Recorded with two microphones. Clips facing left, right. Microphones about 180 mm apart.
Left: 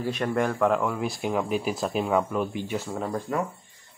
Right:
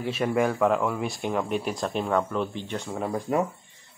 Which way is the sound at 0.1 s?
5° right (ahead or behind).